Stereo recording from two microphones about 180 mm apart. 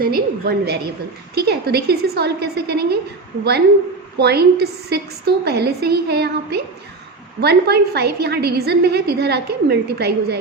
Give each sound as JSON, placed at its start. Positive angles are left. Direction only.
{"t": 0.0, "sound": "a woman's voice", "side_deg": -60}
{"t": 4.2, "sound": "a woman's voice", "side_deg": -65}